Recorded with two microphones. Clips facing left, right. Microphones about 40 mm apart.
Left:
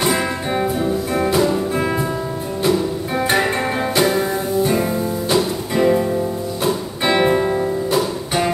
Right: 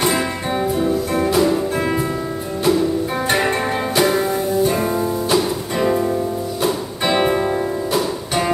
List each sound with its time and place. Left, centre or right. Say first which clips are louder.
0.0 s music: even; centre
3.3 s music: left 1 dB; centre